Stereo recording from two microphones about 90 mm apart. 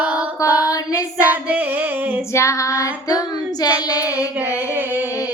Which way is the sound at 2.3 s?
35° left (ahead or behind).